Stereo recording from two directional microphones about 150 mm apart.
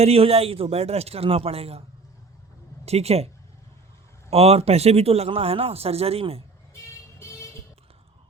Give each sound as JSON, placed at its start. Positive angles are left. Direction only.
{"t": 0.0, "sound": "a man's voice", "side_deg": -40}
{"t": 2.8, "sound": "speech", "side_deg": -45}
{"t": 4.3, "sound": "a man's voice", "side_deg": -40}